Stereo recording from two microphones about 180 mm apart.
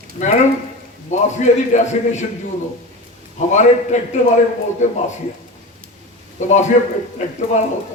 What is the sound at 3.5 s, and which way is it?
A man's voice, 40° left (ahead or behind).